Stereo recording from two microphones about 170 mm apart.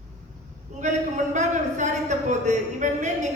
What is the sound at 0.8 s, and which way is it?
A man's voice, 45° right (ahead or behind).